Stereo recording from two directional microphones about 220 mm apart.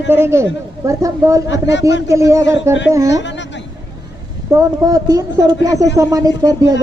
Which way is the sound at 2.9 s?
15° right (ahead or behind).